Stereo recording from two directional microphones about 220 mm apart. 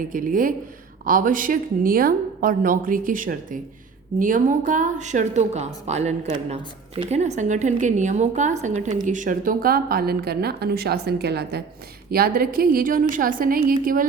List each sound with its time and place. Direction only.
0.1 s a woman's voice: 40° right (ahead or behind)